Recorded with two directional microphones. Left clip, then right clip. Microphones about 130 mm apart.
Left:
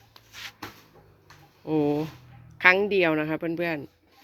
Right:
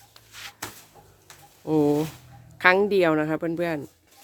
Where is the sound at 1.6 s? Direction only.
35° right (ahead or behind).